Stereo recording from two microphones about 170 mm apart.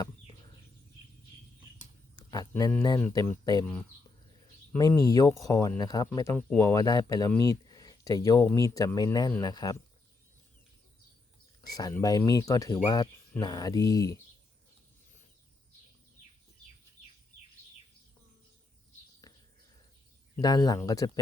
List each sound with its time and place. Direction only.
2.1 s a sound: 20° left (ahead or behind)
2.8 s speech: 20° left (ahead or behind)
4.8 s speech: 20° left (ahead or behind)
11.6 s speech: 20° left (ahead or behind)
19.2 s a sound: 20° left (ahead or behind)
20.4 s speech: 20° left (ahead or behind)